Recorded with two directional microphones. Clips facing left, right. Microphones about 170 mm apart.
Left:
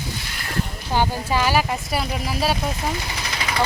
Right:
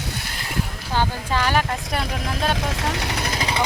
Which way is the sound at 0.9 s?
15° left (ahead or behind).